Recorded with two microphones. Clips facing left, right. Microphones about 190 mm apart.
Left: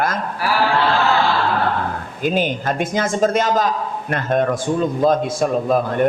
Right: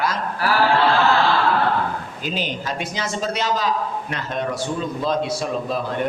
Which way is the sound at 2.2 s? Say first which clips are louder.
Left 9 dB; 50° left (ahead or behind).